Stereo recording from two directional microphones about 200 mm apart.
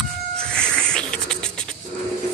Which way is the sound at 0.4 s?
5° left (ahead or behind).